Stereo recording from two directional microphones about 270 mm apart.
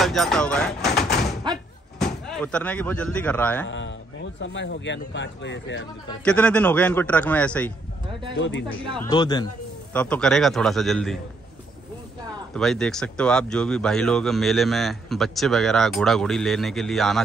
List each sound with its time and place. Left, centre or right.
0.0 s speech: centre
3.6 s speech: left
6.2 s speech: centre
8.4 s speech: left
9.1 s speech: centre
9.9 s speech: centre
12.5 s speech: centre